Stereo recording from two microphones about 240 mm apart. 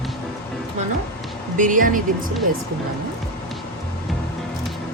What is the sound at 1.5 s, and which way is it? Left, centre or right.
Speech, right.